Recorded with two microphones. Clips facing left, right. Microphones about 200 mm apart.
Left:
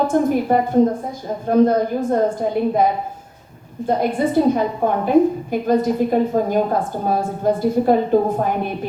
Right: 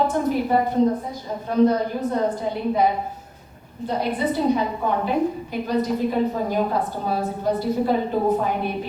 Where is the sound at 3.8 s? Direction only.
50° left (ahead or behind).